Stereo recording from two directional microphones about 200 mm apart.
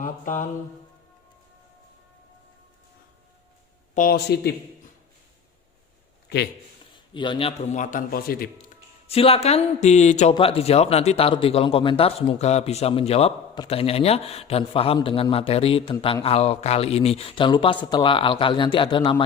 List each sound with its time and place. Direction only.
0.0 s mantra: 40° left (ahead or behind)
3.9 s speech: 50° left (ahead or behind)
6.2 s a sound: 55° left (ahead or behind)
7.1 s a man's voice: 25° left (ahead or behind); by 8.4 s 45° left (ahead or behind)
9.0 s a man's voice: 30° left (ahead or behind)